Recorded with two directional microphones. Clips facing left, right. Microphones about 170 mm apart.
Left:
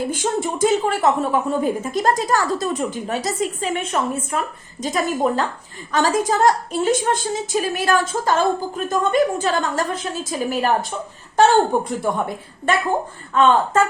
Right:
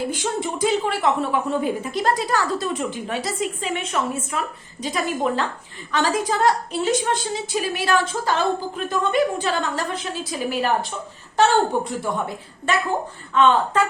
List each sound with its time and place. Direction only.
0.1 s a woman's voice: 45° left (ahead or behind)
11.7 s a woman's voice: 50° left (ahead or behind)